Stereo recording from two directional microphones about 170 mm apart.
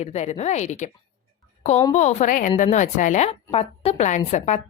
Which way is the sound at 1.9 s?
45° left (ahead or behind).